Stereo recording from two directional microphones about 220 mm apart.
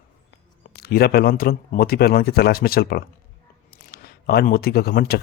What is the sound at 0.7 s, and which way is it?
Speech, 45° left (ahead or behind).